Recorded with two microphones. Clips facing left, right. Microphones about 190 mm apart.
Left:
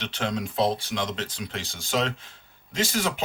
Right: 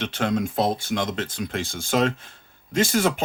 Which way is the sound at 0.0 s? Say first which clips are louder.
Right 5 dB; 50° right (ahead or behind).